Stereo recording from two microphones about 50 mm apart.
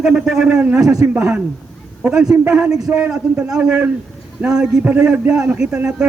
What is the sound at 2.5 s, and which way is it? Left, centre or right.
Speech, centre.